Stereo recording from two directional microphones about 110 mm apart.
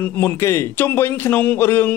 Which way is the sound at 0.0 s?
20° left (ahead or behind).